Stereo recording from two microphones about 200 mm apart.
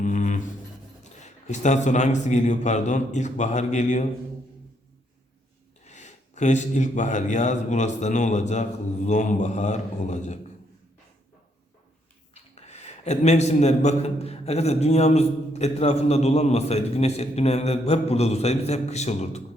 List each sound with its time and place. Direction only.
0.0 s a sound: 40° left (ahead or behind)
1.2 s a man's voice: 35° left (ahead or behind)
5.8 s a man's voice: 35° left (ahead or behind)
12.3 s a man's voice: 35° left (ahead or behind)